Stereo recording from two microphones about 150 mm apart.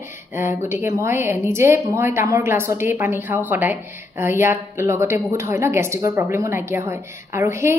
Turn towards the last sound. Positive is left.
turn(degrees=-20)  # may be behind; listen again after turning